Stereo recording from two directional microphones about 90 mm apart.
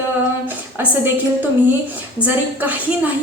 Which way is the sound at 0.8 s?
20° right (ahead or behind).